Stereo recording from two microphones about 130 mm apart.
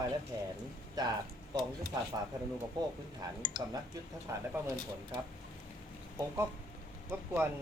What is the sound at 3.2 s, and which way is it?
Speech, 30° right (ahead or behind).